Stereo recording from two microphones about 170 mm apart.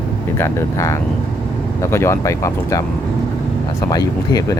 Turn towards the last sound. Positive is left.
turn(degrees=20)  # may be behind; listen again after turning